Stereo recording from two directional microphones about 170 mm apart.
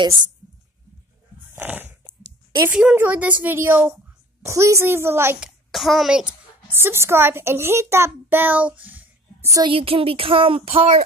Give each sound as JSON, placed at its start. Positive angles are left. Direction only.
{"t": 1.5, "sound": "biting", "side_deg": -10}
{"t": 2.0, "sound": "a sound", "side_deg": -25}
{"t": 2.7, "sound": "a woman's voice", "side_deg": -5}
{"t": 5.7, "sound": "a woman's voice", "side_deg": 0}
{"t": 9.7, "sound": "speech", "side_deg": -35}